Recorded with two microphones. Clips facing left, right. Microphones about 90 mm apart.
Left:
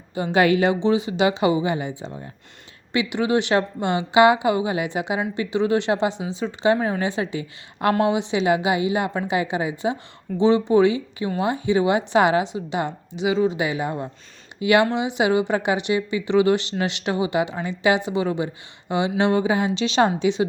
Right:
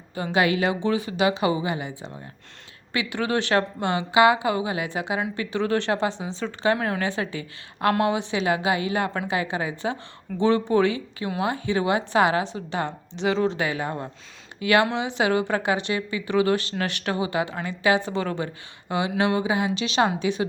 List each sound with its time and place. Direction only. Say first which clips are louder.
0.3 s a woman's voice: left 4 dB; 30° left (ahead or behind)
6.7 s speech: left 3 dB; centre (ahead or behind)
7.0 s a woman's voice: left 3 dB; 20° left (ahead or behind)